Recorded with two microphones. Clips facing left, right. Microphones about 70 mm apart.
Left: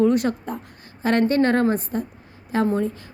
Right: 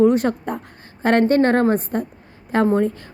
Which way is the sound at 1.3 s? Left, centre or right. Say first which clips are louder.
Right 3 dB; right.